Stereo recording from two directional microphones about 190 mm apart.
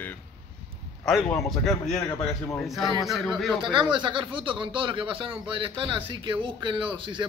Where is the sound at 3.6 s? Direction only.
25° right (ahead or behind).